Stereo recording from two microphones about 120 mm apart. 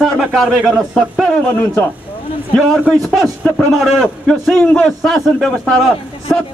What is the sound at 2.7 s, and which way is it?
Speech, centre (ahead or behind).